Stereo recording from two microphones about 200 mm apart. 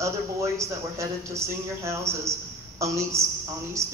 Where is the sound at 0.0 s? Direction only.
15° right (ahead or behind).